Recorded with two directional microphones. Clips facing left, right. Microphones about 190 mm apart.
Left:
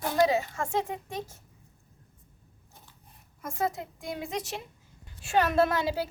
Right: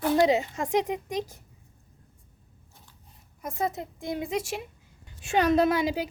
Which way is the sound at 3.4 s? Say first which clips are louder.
Right 1 dB; 20° right (ahead or behind).